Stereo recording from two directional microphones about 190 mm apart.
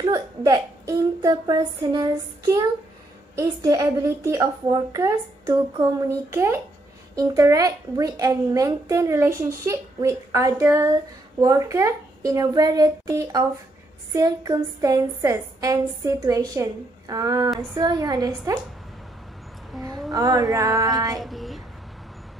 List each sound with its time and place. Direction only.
0.0 s a woman's voice: 20° right (ahead or behind)
19.7 s a sound: centre (ahead or behind)
20.1 s speech: 20° right (ahead or behind)
21.2 s speech: centre (ahead or behind)